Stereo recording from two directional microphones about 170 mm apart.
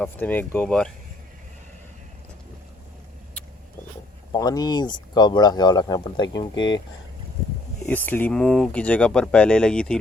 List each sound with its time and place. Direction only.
0.0 s speech: 10° left (ahead or behind)
4.3 s speech: 20° left (ahead or behind)
6.5 s speech: 90° left
7.9 s speech: 10° left (ahead or behind)